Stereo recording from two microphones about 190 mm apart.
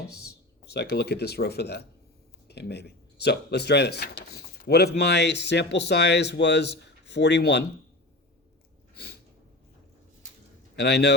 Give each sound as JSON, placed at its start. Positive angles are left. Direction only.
{"t": 0.6, "sound": "speech", "side_deg": 60}
{"t": 10.8, "sound": "speech", "side_deg": 60}